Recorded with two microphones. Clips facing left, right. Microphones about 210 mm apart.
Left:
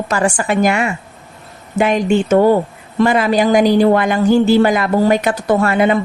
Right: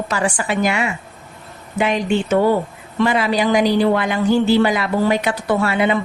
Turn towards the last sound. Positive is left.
turn(degrees=45)  # may be behind; listen again after turning